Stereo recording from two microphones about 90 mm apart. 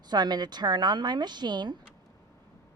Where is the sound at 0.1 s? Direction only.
50° right (ahead or behind).